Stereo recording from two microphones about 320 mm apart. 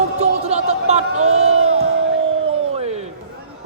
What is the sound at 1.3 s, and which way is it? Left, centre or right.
Speech, right.